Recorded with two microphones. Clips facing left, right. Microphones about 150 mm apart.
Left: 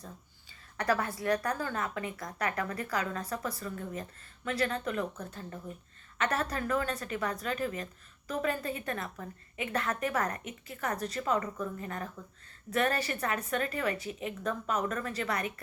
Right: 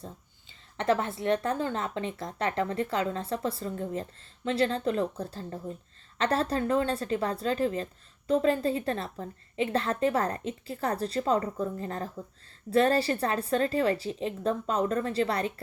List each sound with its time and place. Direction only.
0.8 s a woman's voice: 25° right (ahead or behind)